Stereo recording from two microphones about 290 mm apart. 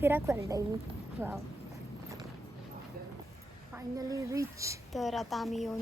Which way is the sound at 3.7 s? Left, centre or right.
Centre.